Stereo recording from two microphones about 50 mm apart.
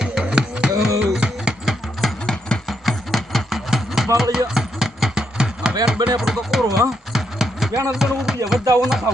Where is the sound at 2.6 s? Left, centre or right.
Centre.